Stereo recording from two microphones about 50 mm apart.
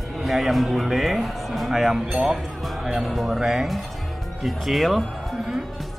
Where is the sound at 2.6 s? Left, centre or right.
Centre.